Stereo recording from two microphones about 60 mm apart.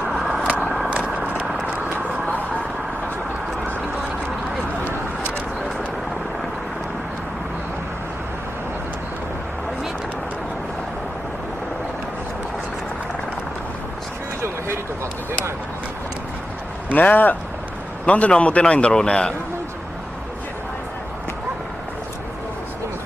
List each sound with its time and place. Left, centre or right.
0.1 s vehicle: centre
0.6 s vehicle: centre
0.8 s vehicle: right
16.9 s a man's voice: left